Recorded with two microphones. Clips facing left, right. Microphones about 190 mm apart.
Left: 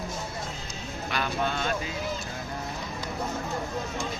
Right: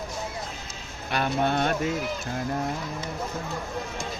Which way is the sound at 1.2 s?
60° right (ahead or behind).